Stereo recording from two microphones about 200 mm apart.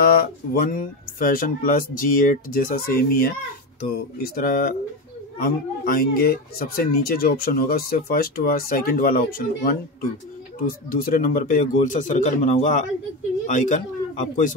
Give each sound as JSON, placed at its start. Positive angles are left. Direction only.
{"t": 0.0, "sound": "speech", "side_deg": 45}
{"t": 4.4, "sound": "speech", "side_deg": 45}
{"t": 10.9, "sound": "speech", "side_deg": 45}